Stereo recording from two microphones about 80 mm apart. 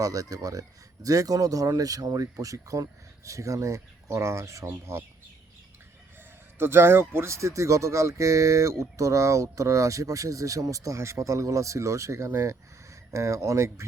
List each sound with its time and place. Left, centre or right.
0.0 s speech: right
6.6 s speech: right